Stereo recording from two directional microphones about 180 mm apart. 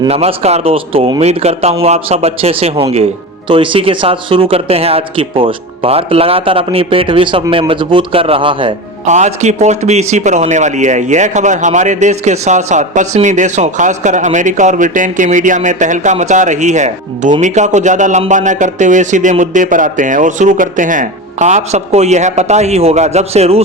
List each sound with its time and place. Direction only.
0.1 s a man's voice: 35° right (ahead or behind)
9.0 s speech: 40° right (ahead or behind)